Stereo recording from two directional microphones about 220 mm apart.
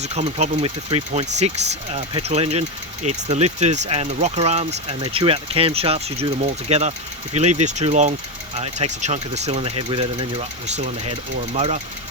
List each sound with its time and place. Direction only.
0.0 s speech: 30° right (ahead or behind)